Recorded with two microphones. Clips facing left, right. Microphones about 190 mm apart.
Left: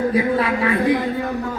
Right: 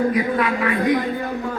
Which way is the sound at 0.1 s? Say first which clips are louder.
Left 2 dB; 30° left (ahead or behind).